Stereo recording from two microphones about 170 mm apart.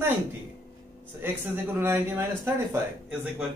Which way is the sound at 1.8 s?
15° right (ahead or behind).